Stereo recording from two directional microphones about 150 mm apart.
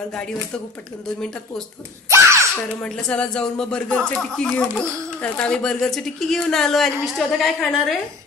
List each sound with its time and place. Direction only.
2.0 s baby laughter: 20° right (ahead or behind)
2.8 s speech: 5° left (ahead or behind)